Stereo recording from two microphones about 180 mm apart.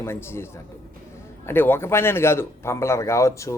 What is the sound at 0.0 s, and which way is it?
A man's voice, 15° left (ahead or behind).